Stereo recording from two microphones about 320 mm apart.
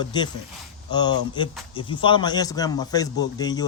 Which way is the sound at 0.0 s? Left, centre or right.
Centre.